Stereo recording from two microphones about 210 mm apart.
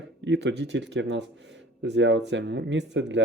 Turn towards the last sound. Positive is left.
turn(degrees=-60)  # may be behind; listen again after turning